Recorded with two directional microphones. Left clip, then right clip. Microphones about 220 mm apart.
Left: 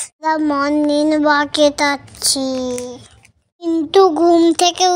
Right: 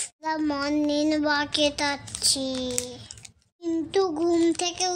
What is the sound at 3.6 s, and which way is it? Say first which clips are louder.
A child's voice: left 13 dB; 30° left (ahead or behind).